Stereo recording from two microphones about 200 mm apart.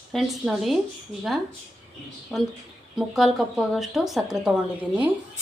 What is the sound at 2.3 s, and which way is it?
A woman's voice, 5° left (ahead or behind).